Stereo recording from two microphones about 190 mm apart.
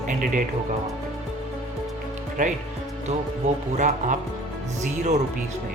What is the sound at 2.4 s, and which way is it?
Speech, 40° right (ahead or behind).